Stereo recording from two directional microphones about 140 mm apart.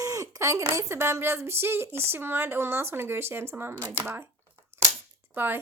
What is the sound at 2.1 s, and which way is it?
Speech, 15° right (ahead or behind).